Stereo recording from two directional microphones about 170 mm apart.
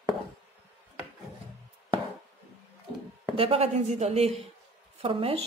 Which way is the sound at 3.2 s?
30° right (ahead or behind).